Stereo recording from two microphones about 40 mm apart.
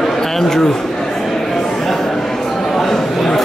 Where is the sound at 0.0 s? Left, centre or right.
Centre.